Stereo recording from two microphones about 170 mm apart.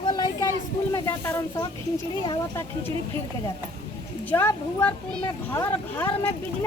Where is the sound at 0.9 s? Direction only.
15° left (ahead or behind).